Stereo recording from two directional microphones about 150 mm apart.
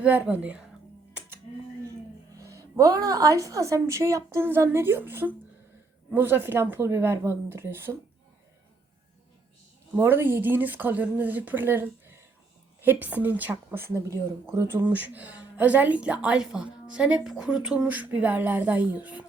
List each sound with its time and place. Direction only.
0.0 s speech: 10° right (ahead or behind)
2.4 s a woman's voice: 20° right (ahead or behind)
9.9 s speech: 15° right (ahead or behind)